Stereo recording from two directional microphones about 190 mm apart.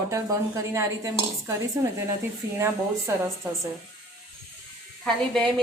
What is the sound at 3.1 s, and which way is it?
Speech, 15° right (ahead or behind).